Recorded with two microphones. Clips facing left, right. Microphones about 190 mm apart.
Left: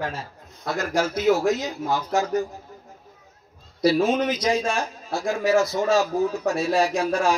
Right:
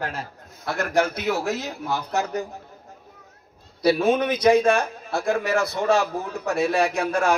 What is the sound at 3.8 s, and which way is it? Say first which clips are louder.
A man's voice: even; 60° right (ahead or behind).